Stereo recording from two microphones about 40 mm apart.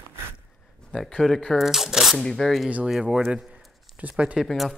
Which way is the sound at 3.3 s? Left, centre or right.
Right.